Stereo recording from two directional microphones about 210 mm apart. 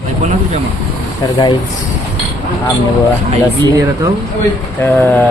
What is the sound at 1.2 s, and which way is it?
Speech, 20° left (ahead or behind).